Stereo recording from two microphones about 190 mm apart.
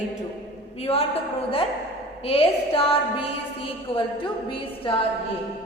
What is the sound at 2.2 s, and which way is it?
A woman's voice, 30° left (ahead or behind).